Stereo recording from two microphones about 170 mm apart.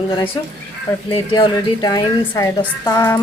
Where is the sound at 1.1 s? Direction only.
30° left (ahead or behind).